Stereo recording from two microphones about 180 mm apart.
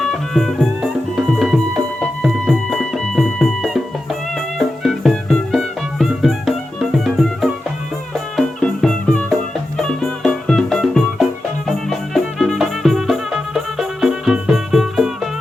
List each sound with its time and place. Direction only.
0.0 s music: centre (ahead or behind)